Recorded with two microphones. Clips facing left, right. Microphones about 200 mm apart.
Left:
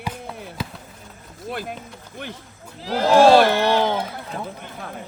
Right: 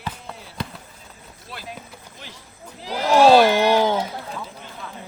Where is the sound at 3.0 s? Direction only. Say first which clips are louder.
Left 1 dB; 55° left (ahead or behind).